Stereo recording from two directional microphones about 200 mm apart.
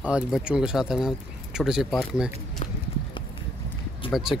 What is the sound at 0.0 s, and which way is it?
Speech, 5° right (ahead or behind).